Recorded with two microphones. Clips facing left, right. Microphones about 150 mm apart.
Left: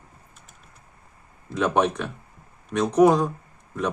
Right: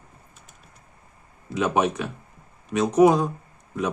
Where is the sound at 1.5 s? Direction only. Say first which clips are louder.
Left 1 dB; 5° right (ahead or behind).